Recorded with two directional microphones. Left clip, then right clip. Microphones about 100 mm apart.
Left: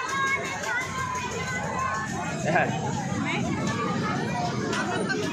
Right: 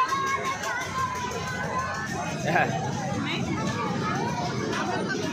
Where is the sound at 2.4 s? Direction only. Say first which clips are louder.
Even; 15° right (ahead or behind).